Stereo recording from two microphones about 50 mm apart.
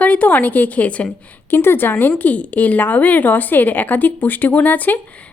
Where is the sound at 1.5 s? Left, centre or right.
Left.